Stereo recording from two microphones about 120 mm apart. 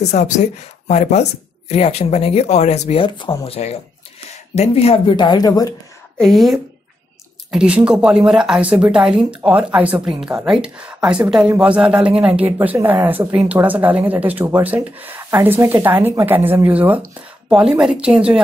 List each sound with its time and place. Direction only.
0.1 s speech: 85° left
3.0 s speech: 45° left (ahead or behind)
6.1 s a woman's voice: centre (ahead or behind)